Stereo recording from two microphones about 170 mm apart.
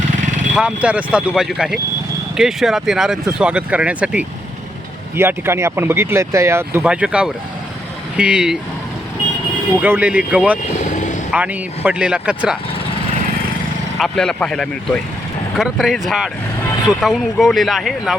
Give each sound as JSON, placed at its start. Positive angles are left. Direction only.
{"t": 0.2, "sound": "vehicle", "side_deg": -45}
{"t": 0.5, "sound": "speech", "side_deg": -5}
{"t": 9.8, "sound": "speech", "side_deg": -10}
{"t": 10.8, "sound": "vehicle", "side_deg": 45}
{"t": 11.3, "sound": "speech", "side_deg": -10}
{"t": 14.0, "sound": "speech", "side_deg": 5}